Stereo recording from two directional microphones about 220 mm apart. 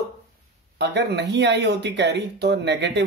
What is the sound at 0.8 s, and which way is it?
Speech, 50° right (ahead or behind).